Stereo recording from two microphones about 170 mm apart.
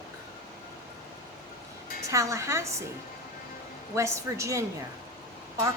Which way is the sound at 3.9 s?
15° right (ahead or behind).